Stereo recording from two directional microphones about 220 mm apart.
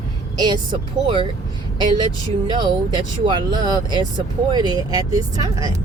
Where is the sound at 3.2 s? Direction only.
20° right (ahead or behind).